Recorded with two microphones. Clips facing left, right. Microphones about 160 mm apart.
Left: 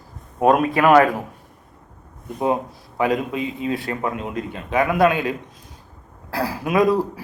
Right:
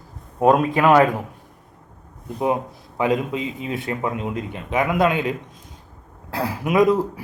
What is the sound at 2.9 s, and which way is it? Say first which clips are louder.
A man's voice: even; 20° right (ahead or behind).